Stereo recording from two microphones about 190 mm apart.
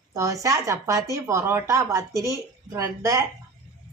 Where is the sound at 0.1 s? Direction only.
15° right (ahead or behind).